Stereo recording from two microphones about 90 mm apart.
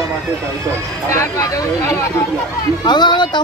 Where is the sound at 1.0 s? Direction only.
35° left (ahead or behind).